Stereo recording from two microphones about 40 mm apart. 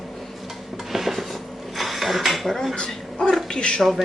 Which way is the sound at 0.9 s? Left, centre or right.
Centre.